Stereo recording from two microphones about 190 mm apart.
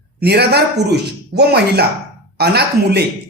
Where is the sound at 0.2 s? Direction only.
60° right (ahead or behind).